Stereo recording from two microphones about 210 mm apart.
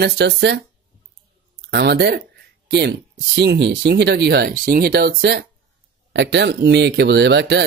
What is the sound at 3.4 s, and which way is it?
Speech, 55° right (ahead or behind).